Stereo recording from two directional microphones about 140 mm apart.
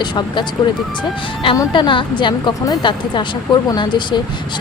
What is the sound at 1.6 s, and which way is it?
Speech, 35° left (ahead or behind).